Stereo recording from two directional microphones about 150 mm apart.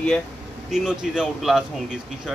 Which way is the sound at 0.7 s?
5° right (ahead or behind).